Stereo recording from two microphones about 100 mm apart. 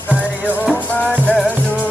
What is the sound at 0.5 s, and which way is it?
Music, 15° left (ahead or behind).